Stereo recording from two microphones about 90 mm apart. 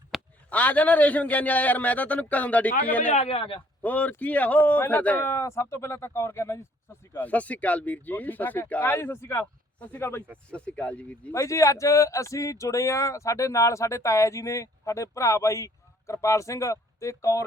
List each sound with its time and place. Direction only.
0.1 s a sound: centre (ahead or behind)
0.5 s a man's voice: 15° left (ahead or behind)
3.2 s a man's voice: 90° left
3.8 s speech: 15° left (ahead or behind)
7.2 s speech: 15° left (ahead or behind)
10.5 s a man's voice: 15° left (ahead or behind)
11.3 s speech: 35° left (ahead or behind)